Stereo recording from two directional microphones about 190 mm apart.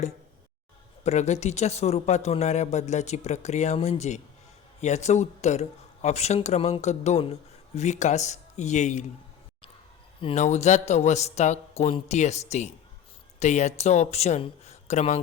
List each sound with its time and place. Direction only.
1.0 s speech: 35° left (ahead or behind)
10.2 s speech: 35° left (ahead or behind)